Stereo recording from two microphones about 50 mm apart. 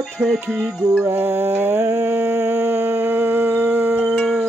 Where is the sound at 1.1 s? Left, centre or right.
Right.